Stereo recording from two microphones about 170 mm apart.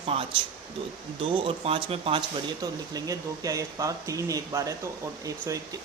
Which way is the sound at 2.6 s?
20° right (ahead or behind).